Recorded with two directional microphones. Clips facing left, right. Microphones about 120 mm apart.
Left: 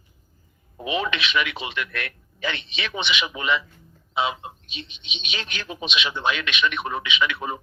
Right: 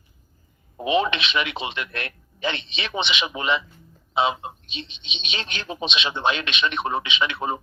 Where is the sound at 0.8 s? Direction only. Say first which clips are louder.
Right 4 dB; 25° right (ahead or behind).